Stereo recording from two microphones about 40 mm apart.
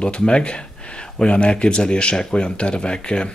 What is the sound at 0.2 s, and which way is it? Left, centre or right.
Speech, left.